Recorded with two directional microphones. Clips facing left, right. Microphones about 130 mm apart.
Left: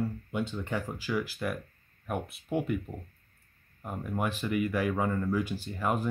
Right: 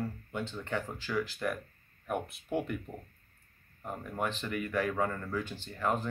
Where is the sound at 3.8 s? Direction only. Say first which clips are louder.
Left 2 dB; 5° left (ahead or behind).